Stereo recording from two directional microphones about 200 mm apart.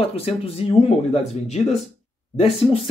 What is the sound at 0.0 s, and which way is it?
Speech, 30° left (ahead or behind).